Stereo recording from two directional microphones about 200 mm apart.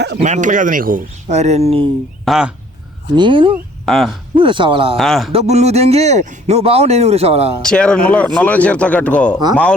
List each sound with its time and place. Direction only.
0.2 s speech: 35° right (ahead or behind)
2.2 s speech: centre (ahead or behind)
3.2 s speech: 25° right (ahead or behind)
3.8 s speech: centre (ahead or behind)
4.4 s speech: 25° right (ahead or behind)
4.9 s speech: centre (ahead or behind)
5.3 s speech: 30° right (ahead or behind)
7.6 s speech: 5° left (ahead or behind)